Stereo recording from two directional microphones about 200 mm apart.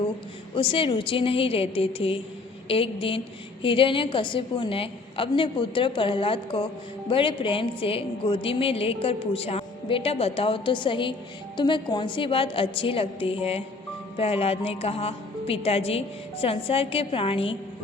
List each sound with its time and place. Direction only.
0.5 s a woman's voice: 25° left (ahead or behind)